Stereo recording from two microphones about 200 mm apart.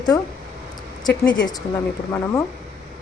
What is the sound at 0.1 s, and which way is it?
Speech, 20° left (ahead or behind).